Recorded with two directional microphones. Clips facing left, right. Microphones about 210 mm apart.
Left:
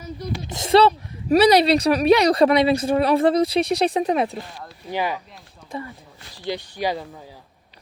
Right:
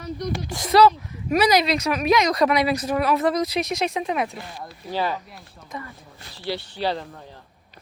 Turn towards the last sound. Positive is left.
turn(degrees=10)  # may be behind; listen again after turning